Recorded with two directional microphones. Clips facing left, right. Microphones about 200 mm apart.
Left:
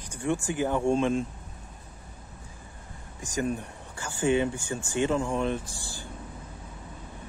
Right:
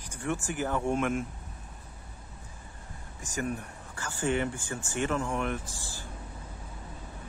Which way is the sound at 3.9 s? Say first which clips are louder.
Left 5 dB; 10° left (ahead or behind).